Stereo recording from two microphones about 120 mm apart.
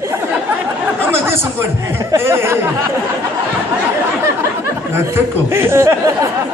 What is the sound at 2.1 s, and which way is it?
Speech, 20° right (ahead or behind).